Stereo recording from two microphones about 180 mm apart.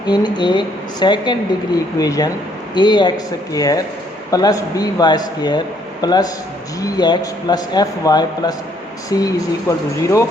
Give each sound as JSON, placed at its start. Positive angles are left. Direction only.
{"t": 0.0, "sound": "speech", "side_deg": 25}